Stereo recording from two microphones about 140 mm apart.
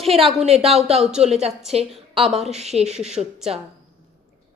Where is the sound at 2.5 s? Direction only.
50° right (ahead or behind).